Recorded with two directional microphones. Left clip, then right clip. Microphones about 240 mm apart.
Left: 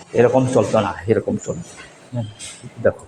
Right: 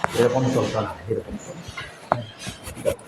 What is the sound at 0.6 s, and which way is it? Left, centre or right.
Speech, left.